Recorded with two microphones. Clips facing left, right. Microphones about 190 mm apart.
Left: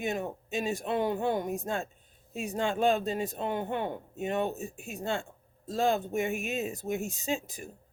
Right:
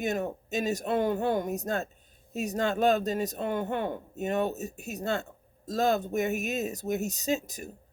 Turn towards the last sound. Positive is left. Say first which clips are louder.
# right 3 dB
turn(degrees=-40)  # may be behind; listen again after turning